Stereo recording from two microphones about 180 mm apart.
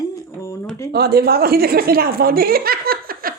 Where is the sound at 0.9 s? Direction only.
60° right (ahead or behind).